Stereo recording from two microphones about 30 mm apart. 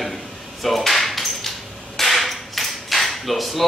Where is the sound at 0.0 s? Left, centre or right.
Centre.